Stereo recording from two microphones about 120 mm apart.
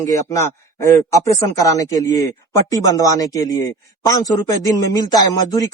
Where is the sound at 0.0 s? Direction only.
25° left (ahead or behind).